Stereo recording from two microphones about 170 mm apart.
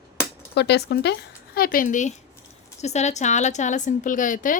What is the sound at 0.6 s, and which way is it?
A woman's voice, 85° left.